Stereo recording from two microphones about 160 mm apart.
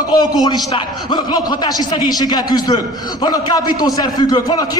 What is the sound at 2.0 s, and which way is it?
A man's voice, 25° left (ahead or behind).